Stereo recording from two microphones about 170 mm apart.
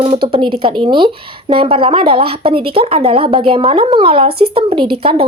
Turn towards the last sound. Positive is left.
turn(degrees=-35)  # may be behind; listen again after turning